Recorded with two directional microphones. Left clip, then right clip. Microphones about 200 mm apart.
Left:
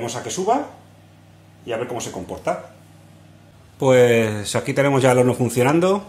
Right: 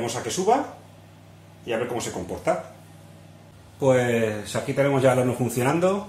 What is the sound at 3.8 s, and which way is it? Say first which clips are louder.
Speech: left 6 dB; 45° left (ahead or behind).